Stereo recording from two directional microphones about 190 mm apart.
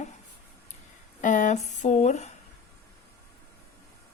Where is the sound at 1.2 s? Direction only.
40° left (ahead or behind).